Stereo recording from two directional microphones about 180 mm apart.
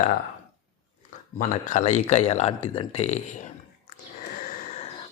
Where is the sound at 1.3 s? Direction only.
45° left (ahead or behind).